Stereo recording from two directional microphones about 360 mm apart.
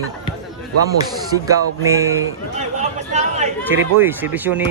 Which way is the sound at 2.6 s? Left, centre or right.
Centre.